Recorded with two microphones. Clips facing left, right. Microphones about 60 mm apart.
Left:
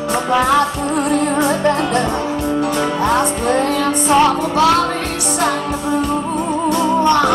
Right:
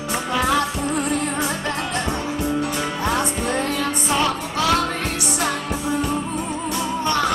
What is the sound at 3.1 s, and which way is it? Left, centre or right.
Music, left.